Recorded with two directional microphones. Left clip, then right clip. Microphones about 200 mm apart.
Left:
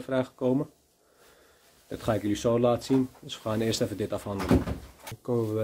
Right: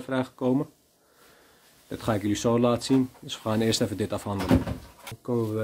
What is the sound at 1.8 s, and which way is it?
Speech, 15° right (ahead or behind).